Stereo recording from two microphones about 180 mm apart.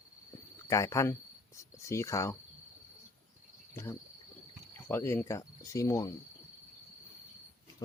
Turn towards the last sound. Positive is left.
turn(degrees=15)  # may be behind; listen again after turning